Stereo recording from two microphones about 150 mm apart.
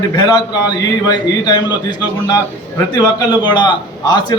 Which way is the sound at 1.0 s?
30° left (ahead or behind).